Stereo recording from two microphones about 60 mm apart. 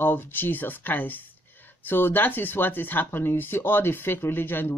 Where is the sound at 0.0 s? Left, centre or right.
Left.